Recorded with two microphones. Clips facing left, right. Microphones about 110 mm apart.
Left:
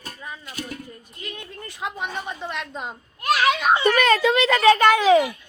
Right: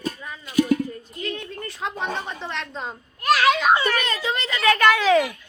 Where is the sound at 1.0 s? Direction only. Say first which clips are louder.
Right 6 dB; 10° left (ahead or behind).